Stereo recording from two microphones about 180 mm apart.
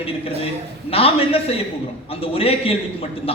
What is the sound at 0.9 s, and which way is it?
A man's voice, 30° left (ahead or behind).